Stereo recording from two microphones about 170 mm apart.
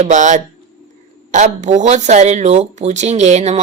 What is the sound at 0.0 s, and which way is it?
A woman's voice, 45° right (ahead or behind).